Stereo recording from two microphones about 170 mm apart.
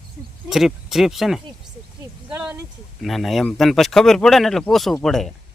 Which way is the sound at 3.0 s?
Centre (ahead or behind).